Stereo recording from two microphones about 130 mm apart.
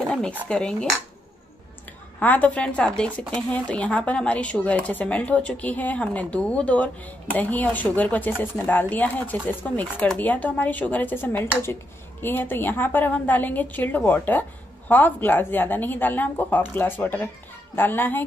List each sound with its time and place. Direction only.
0.5 s speech: 5° left (ahead or behind)
2.1 s speech: 10° left (ahead or behind)